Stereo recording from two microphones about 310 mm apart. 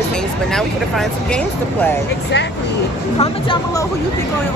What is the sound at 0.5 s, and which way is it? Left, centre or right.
Speech, centre.